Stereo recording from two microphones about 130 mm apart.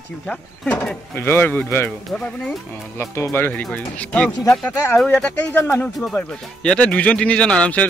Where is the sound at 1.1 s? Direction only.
15° left (ahead or behind).